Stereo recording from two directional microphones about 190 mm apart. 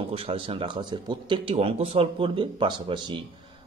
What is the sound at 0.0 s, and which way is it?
Speech, 30° right (ahead or behind).